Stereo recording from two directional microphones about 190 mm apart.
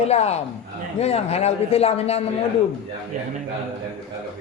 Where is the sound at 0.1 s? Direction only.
35° left (ahead or behind).